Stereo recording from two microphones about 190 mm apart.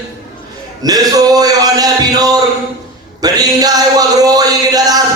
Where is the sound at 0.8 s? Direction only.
20° right (ahead or behind).